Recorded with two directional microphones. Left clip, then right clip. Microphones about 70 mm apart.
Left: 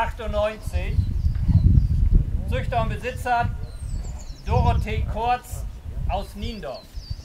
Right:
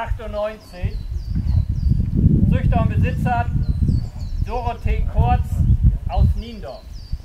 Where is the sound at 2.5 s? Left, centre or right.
Left.